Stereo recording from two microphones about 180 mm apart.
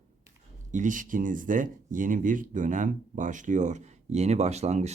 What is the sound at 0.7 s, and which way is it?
Speech, 45° right (ahead or behind).